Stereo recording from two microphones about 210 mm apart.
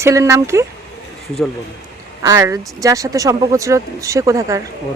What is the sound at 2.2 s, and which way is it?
Speech, 15° right (ahead or behind).